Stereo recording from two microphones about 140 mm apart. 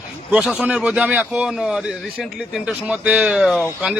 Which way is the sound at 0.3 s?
5° right (ahead or behind).